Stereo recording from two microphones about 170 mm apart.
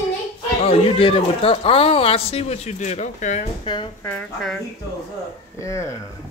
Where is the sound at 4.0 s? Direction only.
5° left (ahead or behind).